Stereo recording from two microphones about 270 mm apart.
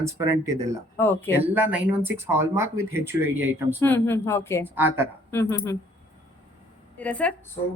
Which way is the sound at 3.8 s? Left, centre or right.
Centre.